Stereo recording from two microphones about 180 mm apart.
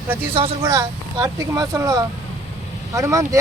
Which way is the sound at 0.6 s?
20° right (ahead or behind).